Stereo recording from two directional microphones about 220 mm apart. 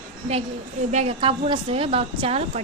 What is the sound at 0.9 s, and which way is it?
A woman's voice, 25° right (ahead or behind).